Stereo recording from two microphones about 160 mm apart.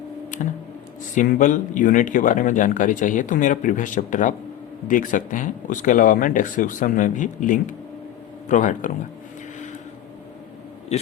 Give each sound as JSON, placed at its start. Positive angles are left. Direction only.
{"t": 0.4, "sound": "speech", "side_deg": 50}